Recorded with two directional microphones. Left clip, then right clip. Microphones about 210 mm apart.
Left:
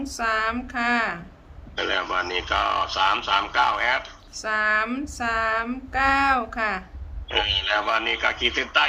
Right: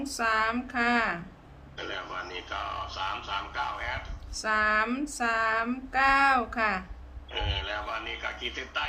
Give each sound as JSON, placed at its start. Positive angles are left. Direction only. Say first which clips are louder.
{"t": 0.0, "sound": "female singing", "louder": "left 3 dB", "side_deg": 0}
{"t": 1.7, "sound": "speech", "louder": "left 12 dB", "side_deg": 55}
{"t": 4.4, "sound": "female singing", "louder": "left 3 dB", "side_deg": 0}
{"t": 7.3, "sound": "speech", "louder": "left 11 dB", "side_deg": 55}